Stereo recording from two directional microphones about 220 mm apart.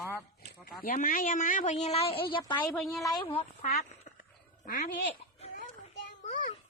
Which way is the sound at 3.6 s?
40° left (ahead or behind).